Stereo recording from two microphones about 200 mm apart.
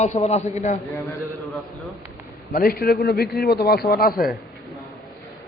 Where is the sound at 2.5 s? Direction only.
50° left (ahead or behind).